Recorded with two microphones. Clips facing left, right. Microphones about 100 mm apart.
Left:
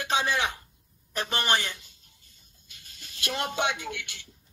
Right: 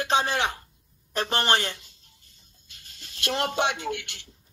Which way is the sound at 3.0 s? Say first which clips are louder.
Right 4 dB; 35° right (ahead or behind).